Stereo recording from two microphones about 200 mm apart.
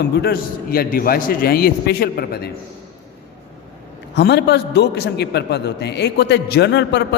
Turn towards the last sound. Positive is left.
turn(degrees=60)  # may be behind; listen again after turning